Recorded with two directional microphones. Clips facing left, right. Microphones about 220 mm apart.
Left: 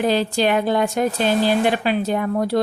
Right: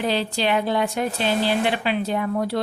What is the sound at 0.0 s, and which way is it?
Speech, 45° left (ahead or behind).